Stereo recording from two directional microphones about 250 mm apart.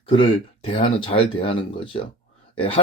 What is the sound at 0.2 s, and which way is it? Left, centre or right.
Speech, left.